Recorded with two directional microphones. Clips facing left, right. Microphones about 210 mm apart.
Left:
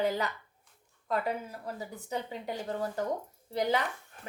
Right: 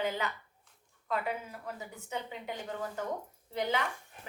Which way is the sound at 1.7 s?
35° left (ahead or behind).